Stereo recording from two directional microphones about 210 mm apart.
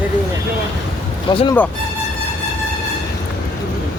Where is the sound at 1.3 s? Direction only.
25° left (ahead or behind).